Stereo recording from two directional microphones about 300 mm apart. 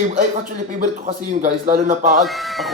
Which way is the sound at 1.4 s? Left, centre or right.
Right.